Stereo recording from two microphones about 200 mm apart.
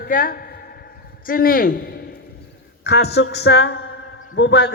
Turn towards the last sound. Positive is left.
turn(degrees=60)  # may be behind; listen again after turning